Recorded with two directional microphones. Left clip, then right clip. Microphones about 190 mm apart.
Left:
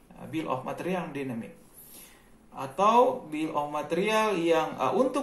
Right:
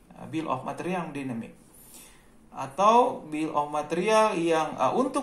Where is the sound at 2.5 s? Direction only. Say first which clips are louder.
Right 2 dB; 25° right (ahead or behind).